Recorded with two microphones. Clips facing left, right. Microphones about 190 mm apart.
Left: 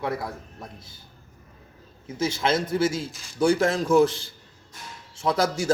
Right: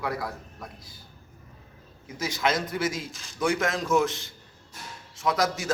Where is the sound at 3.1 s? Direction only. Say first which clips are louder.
Even; centre (ahead or behind).